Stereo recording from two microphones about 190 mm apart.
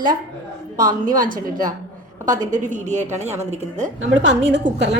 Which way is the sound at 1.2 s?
45° right (ahead or behind).